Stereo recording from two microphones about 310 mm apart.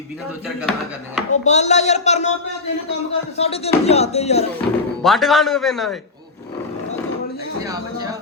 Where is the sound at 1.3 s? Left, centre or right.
Left.